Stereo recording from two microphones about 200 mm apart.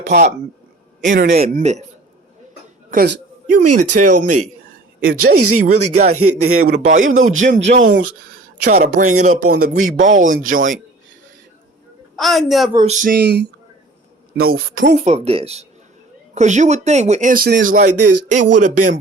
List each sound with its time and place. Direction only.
1.0 s speech: 40° right (ahead or behind)
2.9 s speech: 45° right (ahead or behind)
5.4 s a woman's voice: 90° right
5.6 s speech: 35° right (ahead or behind)
6.1 s a woman's voice: 90° right
6.7 s speech: 40° right (ahead or behind)
12.1 s a woman's voice: centre (ahead or behind)
12.7 s speech: 35° right (ahead or behind); by 13.5 s 55° right (ahead or behind)
14.3 s a woman's voice: 90° right
14.9 s speech: 35° right (ahead or behind)